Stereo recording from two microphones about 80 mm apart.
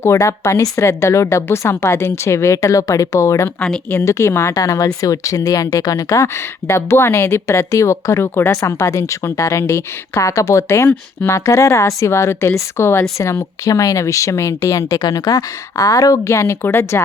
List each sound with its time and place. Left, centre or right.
0.0 s speech: left